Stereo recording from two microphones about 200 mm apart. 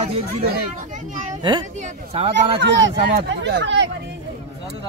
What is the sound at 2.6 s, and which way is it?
Speech, 65° right (ahead or behind).